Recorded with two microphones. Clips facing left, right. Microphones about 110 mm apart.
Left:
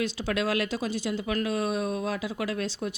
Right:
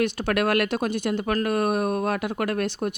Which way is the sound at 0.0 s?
60° right (ahead or behind).